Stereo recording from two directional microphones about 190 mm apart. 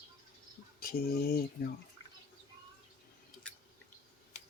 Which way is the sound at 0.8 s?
55° left (ahead or behind).